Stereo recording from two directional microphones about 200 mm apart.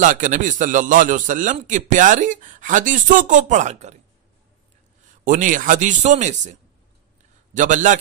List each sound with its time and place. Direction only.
0.0 s a man's voice: 40° right (ahead or behind)
5.2 s a man's voice: 40° right (ahead or behind)